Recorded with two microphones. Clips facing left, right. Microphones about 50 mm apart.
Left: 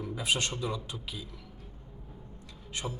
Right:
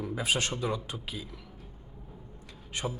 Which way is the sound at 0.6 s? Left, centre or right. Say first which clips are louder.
Right 3 dB; right.